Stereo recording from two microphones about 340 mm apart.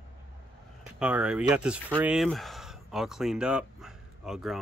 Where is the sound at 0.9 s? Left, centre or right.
Centre.